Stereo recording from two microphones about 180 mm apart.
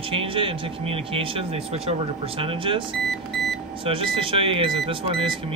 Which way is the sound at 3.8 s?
30° right (ahead or behind).